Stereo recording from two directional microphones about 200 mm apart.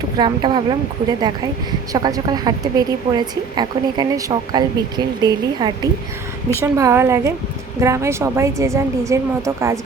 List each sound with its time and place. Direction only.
0.2 s a woman's voice: 25° right (ahead or behind)
1.9 s a woman's voice: 20° right (ahead or behind)